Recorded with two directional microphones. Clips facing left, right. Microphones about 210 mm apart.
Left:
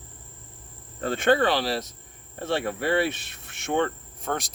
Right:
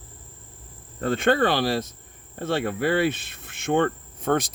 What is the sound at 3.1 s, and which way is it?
Speech, 50° right (ahead or behind).